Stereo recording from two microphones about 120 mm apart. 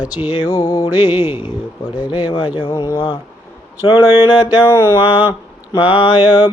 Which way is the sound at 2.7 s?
25° left (ahead or behind).